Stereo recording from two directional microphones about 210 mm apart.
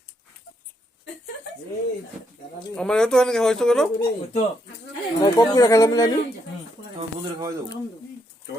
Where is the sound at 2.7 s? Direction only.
5° left (ahead or behind).